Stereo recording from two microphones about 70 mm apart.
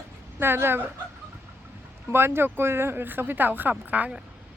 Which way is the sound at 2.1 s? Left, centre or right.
Right.